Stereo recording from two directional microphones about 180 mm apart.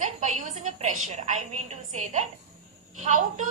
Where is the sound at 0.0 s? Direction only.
45° right (ahead or behind).